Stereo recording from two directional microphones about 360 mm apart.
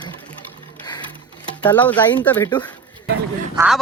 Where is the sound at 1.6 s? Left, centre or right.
Centre.